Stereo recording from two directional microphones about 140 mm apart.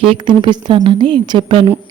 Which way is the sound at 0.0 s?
45° right (ahead or behind).